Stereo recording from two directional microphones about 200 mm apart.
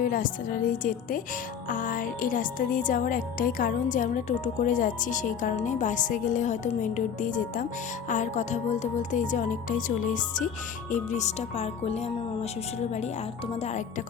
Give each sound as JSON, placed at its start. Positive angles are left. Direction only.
{"t": 0.0, "sound": "a woman's voice", "side_deg": 40}
{"t": 13.6, "sound": "speech", "side_deg": 35}